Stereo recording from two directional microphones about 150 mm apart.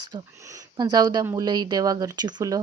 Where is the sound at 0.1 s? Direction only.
25° right (ahead or behind).